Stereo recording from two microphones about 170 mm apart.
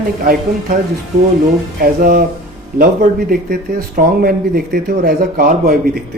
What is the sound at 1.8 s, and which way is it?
Speech, 60° right (ahead or behind).